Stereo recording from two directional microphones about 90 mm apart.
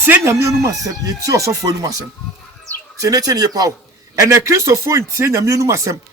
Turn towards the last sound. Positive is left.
turn(degrees=-35)  # may be behind; listen again after turning